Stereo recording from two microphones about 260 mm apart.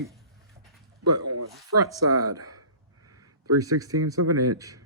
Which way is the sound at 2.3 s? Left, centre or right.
Right.